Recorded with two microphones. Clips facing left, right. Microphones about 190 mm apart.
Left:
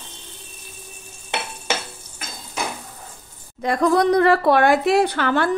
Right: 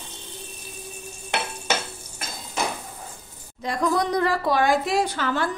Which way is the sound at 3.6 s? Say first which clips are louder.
Left 6 dB; 60° left (ahead or behind).